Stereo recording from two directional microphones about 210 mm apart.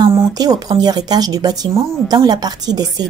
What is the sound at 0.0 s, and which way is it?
Speech, 15° right (ahead or behind).